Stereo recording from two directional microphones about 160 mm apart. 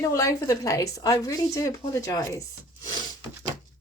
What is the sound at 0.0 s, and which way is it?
Speech, 20° left (ahead or behind).